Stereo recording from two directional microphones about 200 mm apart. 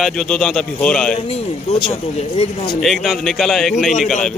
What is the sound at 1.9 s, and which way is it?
Speech, 30° left (ahead or behind).